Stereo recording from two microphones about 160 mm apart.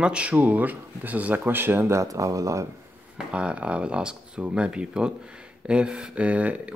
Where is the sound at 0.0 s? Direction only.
5° right (ahead or behind).